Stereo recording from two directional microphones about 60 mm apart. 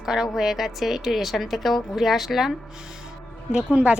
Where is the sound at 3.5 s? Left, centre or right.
Centre.